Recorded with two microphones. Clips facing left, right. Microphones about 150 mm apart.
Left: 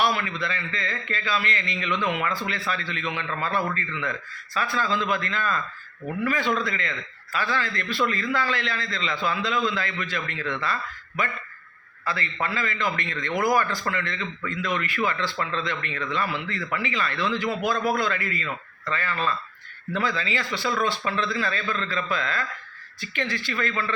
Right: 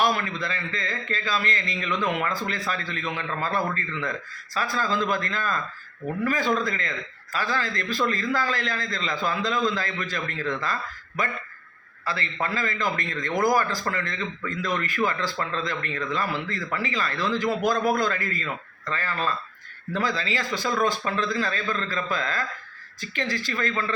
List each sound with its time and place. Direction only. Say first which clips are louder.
0.0 s a man's voice: even; 45° right (ahead or behind)
12.0 s a man's voice: even; 35° right (ahead or behind)